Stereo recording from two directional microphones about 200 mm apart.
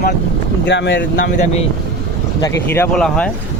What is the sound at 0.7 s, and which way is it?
Speech, 60° left (ahead or behind).